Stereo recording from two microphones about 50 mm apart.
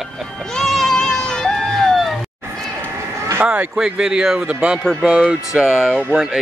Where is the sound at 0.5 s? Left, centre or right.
Centre.